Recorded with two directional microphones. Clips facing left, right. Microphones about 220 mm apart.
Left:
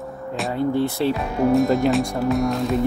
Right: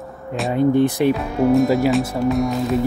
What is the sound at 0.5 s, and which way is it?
Speech, 15° right (ahead or behind).